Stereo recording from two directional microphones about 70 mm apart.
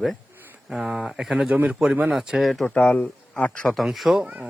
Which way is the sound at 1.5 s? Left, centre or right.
Right.